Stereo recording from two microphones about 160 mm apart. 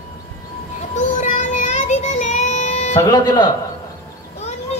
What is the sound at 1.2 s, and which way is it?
Child singing, 50° left (ahead or behind).